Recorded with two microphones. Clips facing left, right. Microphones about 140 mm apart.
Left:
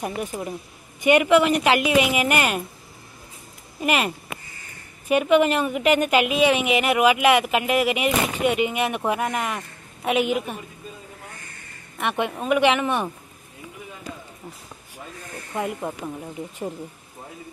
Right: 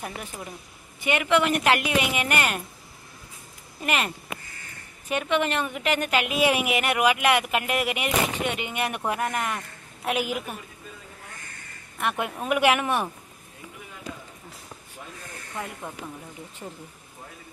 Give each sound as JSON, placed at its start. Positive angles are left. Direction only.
{"t": 0.0, "sound": "a woman's voice", "side_deg": 20}
{"t": 1.4, "sound": "a woman's voice", "side_deg": 0}
{"t": 3.8, "sound": "a woman's voice", "side_deg": 10}
{"t": 6.3, "sound": "speech", "side_deg": -5}
{"t": 12.0, "sound": "speech", "side_deg": 0}